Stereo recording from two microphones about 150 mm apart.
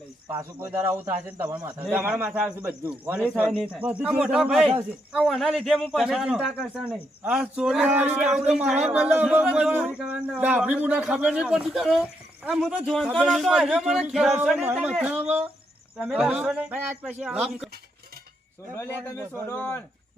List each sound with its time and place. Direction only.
0.6 s a man's voice: 15° right (ahead or behind)
18.7 s a man's voice: 15° left (ahead or behind)